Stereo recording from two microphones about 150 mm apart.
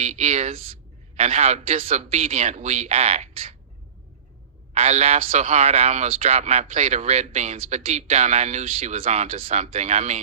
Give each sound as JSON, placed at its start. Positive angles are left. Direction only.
{"t": 0.0, "sound": "speech", "side_deg": -50}
{"t": 4.7, "sound": "speech", "side_deg": -45}